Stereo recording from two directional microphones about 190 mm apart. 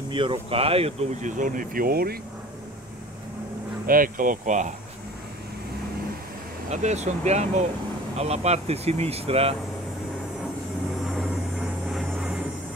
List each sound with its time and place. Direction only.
0.1 s speech: 25° right (ahead or behind); by 2.1 s 50° right (ahead or behind)
3.8 s speech: 45° right (ahead or behind)
6.7 s speech: 35° right (ahead or behind)
11.9 s vehicle: 5° right (ahead or behind)